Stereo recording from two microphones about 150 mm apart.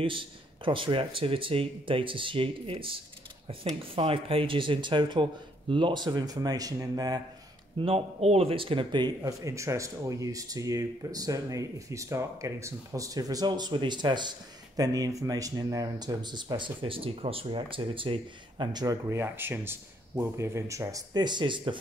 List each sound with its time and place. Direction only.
0.0 s speech: 35° right (ahead or behind)
7.8 s speech: 40° right (ahead or behind)
19.0 s speech: 15° right (ahead or behind); by 21.7 s 30° right (ahead or behind)